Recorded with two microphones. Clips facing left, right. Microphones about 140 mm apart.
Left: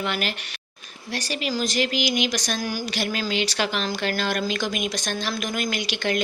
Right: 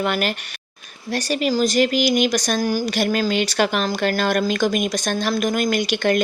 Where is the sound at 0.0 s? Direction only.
50° right (ahead or behind).